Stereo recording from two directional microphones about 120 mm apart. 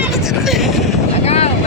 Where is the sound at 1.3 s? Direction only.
60° left (ahead or behind).